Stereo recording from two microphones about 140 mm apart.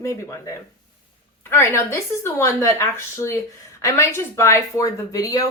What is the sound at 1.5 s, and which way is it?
Speech, 20° left (ahead or behind).